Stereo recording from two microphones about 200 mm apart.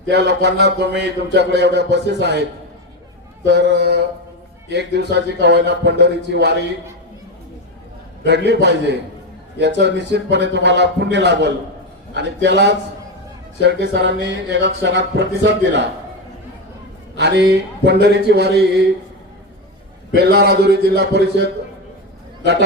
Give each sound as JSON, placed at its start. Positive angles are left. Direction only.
{"t": 0.1, "sound": "a man's voice", "side_deg": -60}
{"t": 3.4, "sound": "a man's voice", "side_deg": -60}
{"t": 8.2, "sound": "a man's voice", "side_deg": -60}
{"t": 17.2, "sound": "a man's voice", "side_deg": -60}
{"t": 20.1, "sound": "a man's voice", "side_deg": -55}